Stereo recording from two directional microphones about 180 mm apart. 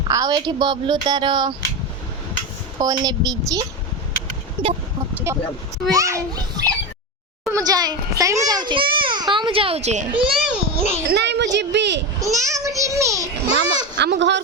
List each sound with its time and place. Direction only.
0.1 s speech: 20° right (ahead or behind)
2.7 s speech: 20° right (ahead or behind)
5.1 s a child's voice: 15° right (ahead or behind); by 10.2 s 40° right (ahead or behind)
10.2 s a sound: 5° right (ahead or behind)
11.1 s a woman's voice: 70° right (ahead or behind)
12.2 s a child's voice: 15° right (ahead or behind)
13.9 s speech: 75° right (ahead or behind)